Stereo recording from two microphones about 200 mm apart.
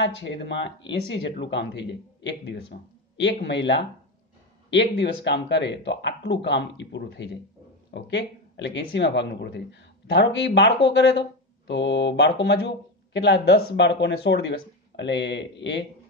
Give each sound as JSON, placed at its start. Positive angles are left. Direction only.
{"t": 0.0, "sound": "speech", "side_deg": 60}
{"t": 2.7, "sound": "a sound", "side_deg": 60}
{"t": 3.3, "sound": "speech", "side_deg": 60}